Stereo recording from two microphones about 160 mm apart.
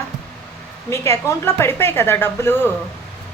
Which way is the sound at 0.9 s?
15° left (ahead or behind).